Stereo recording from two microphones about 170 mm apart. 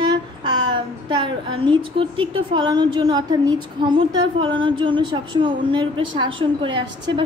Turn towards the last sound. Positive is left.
turn(degrees=-30)  # may be behind; listen again after turning